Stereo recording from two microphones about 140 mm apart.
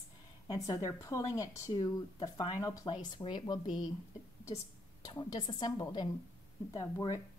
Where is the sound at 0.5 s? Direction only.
25° left (ahead or behind).